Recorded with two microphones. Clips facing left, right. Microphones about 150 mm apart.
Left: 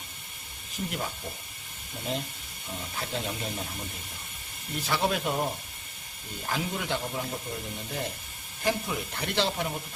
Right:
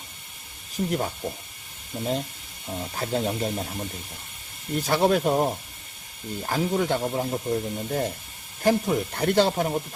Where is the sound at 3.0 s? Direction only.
40° right (ahead or behind).